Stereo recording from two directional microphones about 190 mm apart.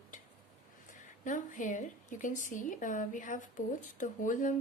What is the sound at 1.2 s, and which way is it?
A woman's voice, 40° left (ahead or behind).